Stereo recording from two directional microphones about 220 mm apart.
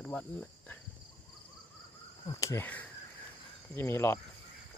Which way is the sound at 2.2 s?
15° left (ahead or behind).